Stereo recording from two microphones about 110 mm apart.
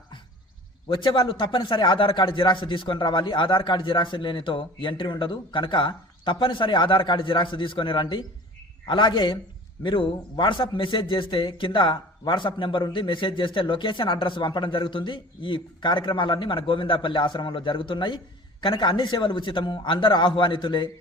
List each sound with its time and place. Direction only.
0.9 s a man's voice: 45° left (ahead or behind)